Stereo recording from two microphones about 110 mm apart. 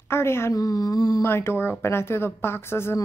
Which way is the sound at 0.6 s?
35° left (ahead or behind).